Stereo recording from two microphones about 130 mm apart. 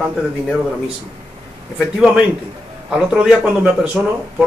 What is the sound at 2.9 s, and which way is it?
A man's voice, 5° right (ahead or behind).